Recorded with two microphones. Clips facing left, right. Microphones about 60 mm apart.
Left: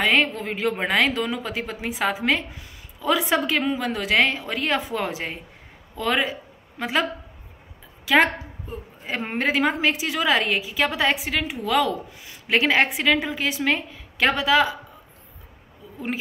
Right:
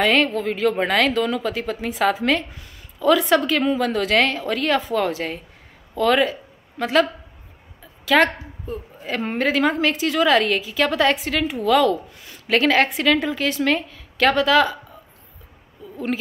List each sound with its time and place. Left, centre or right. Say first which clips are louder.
0.0 s a woman's voice: right 3 dB; centre